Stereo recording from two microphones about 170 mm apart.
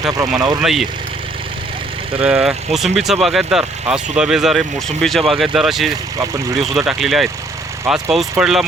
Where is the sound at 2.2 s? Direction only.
5° right (ahead or behind).